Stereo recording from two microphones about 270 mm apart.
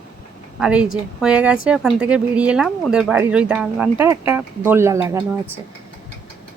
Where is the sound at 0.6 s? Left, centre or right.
Centre.